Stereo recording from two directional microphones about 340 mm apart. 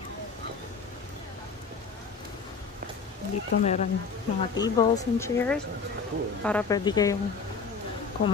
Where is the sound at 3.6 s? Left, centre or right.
Left.